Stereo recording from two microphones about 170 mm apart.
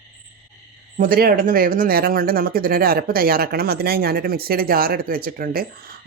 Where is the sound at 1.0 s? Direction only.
60° right (ahead or behind).